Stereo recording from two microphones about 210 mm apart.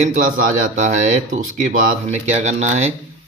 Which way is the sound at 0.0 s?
40° right (ahead or behind).